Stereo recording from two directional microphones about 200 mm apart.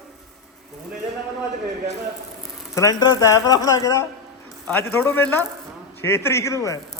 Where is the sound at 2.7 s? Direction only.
20° left (ahead or behind).